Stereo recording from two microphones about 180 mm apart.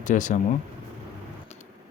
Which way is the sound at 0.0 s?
45° left (ahead or behind).